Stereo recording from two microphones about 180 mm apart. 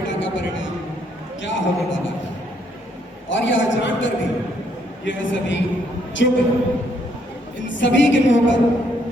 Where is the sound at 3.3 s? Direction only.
90° left.